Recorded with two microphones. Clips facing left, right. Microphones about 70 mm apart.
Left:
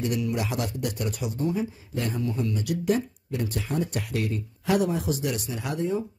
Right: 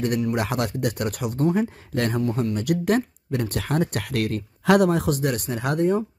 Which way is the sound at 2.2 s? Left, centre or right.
Right.